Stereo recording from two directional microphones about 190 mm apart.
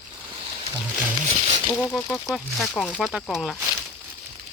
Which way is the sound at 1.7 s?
5° left (ahead or behind).